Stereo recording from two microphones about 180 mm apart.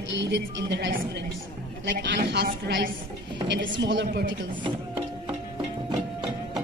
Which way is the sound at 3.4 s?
85° right.